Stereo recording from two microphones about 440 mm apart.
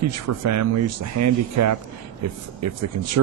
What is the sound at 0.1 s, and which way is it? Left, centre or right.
Speech, right.